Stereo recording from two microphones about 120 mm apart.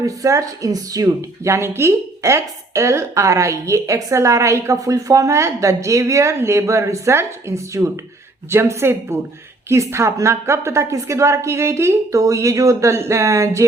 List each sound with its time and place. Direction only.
0.0 s speech: 25° right (ahead or behind)